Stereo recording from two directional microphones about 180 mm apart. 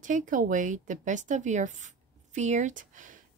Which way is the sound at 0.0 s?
45° right (ahead or behind).